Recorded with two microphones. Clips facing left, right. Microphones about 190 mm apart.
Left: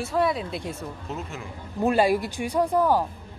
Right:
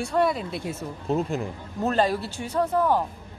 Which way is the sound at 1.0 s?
35° right (ahead or behind).